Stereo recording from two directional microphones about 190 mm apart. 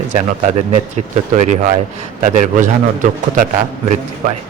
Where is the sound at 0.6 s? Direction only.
40° right (ahead or behind).